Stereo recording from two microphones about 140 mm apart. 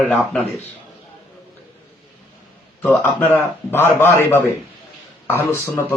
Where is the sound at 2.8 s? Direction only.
10° left (ahead or behind).